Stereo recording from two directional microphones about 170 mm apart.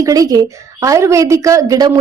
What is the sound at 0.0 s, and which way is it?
A woman's voice, 20° right (ahead or behind).